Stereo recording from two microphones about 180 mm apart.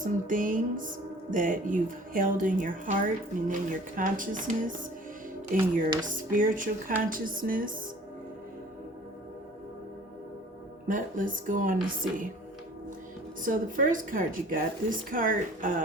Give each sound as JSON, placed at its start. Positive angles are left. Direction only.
{"t": 0.0, "sound": "a woman's voice", "side_deg": -50}
{"t": 10.8, "sound": "a woman's voice", "side_deg": -50}
{"t": 13.4, "sound": "a woman's voice", "side_deg": -50}